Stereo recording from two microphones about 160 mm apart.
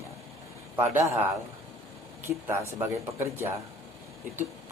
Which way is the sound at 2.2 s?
15° right (ahead or behind).